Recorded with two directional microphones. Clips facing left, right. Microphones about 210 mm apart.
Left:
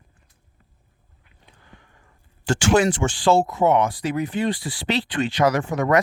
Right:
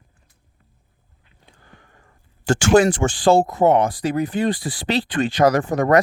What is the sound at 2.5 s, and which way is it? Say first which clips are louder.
Speech: right 4 dB; 50° right (ahead or behind).